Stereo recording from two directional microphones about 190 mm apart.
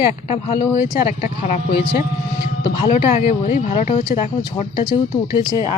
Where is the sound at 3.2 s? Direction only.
30° left (ahead or behind).